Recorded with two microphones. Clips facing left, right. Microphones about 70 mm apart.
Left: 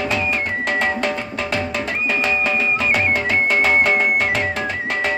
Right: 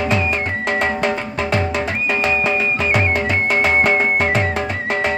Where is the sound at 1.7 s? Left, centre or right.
Centre.